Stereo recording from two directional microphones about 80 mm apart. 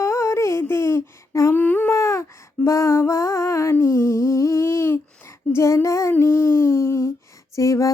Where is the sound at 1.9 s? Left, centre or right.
Left.